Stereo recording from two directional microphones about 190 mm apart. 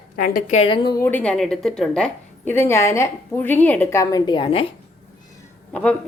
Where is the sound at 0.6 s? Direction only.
25° left (ahead or behind).